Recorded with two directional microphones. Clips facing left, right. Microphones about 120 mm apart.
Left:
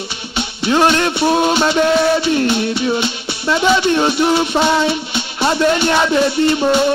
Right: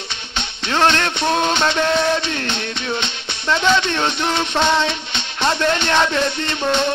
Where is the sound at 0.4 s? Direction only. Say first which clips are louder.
Left 4 dB; 10° left (ahead or behind).